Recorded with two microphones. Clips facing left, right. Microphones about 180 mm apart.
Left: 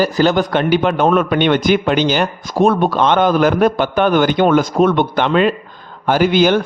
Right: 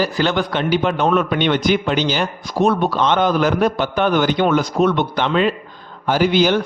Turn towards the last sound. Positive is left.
turn(degrees=50)  # may be behind; listen again after turning